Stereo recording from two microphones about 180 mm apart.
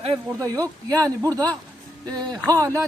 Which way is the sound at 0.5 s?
20° right (ahead or behind).